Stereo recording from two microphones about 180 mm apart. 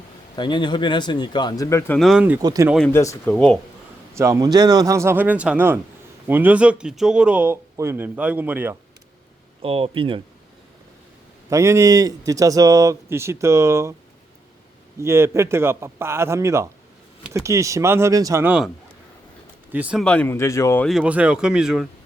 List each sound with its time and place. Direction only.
0.3 s speech: 25° left (ahead or behind)
2.0 s speech: centre (ahead or behind)
2.4 s speech: 20° right (ahead or behind)
2.6 s speech: centre (ahead or behind)
2.9 s speech: 15° left (ahead or behind)
3.2 s speech: 5° left (ahead or behind)
4.1 s speech: 15° right (ahead or behind)
9.6 s speech: 30° right (ahead or behind)
11.4 s speech: 15° right (ahead or behind)
14.9 s speech: 15° right (ahead or behind)
19.7 s speech: 5° right (ahead or behind)
20.1 s speech: 10° left (ahead or behind)
20.8 s speech: 5° right (ahead or behind)